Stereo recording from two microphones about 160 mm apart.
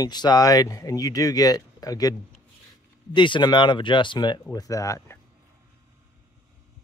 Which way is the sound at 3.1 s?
30° left (ahead or behind).